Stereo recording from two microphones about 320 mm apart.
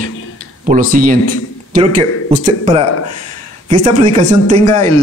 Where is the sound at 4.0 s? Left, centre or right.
Right.